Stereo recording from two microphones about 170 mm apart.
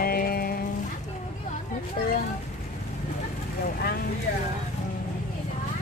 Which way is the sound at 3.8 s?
65° left (ahead or behind).